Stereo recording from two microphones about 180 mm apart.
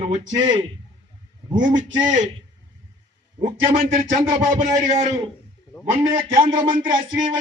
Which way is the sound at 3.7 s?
50° right (ahead or behind).